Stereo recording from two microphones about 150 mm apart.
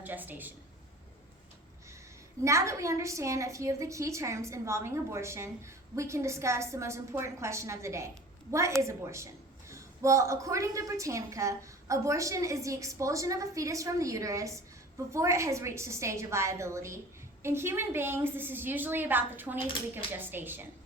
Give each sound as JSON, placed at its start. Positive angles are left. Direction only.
{"t": 0.0, "sound": "a woman's voice", "side_deg": -10}
{"t": 2.4, "sound": "a woman's voice", "side_deg": -20}